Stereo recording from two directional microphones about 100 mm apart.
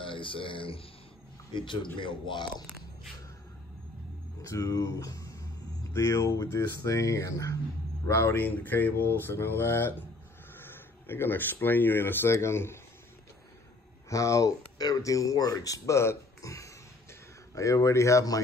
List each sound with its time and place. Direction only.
0.0 s a man's voice: 60° left (ahead or behind)
4.4 s speech: 35° left (ahead or behind)
14.0 s speech: 30° left (ahead or behind)